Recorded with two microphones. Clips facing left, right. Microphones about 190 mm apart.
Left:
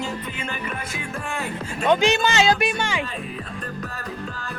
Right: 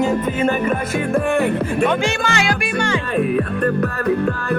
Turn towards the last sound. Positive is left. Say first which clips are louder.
# right 14 dB
turn(degrees=-60)  # may be behind; listen again after turning